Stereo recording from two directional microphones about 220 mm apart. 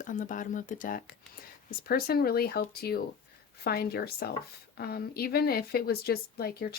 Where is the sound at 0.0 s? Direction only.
35° left (ahead or behind).